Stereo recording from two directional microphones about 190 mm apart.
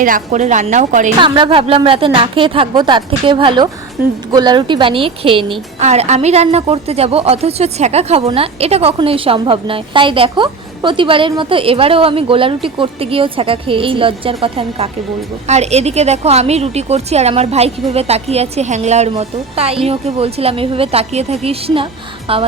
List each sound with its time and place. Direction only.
0.0 s a woman's voice: 40° right (ahead or behind)
1.2 s a woman's voice: 25° right (ahead or behind)